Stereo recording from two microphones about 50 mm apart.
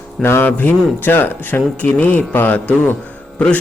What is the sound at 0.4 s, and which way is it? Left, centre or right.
Speech, left.